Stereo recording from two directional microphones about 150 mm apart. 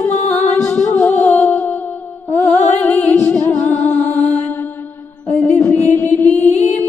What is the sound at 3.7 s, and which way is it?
Music, 50° left (ahead or behind).